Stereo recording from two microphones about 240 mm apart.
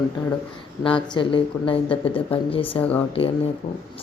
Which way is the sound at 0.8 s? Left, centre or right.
Left.